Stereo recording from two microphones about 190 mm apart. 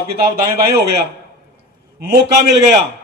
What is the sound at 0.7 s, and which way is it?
Speech, 60° right (ahead or behind).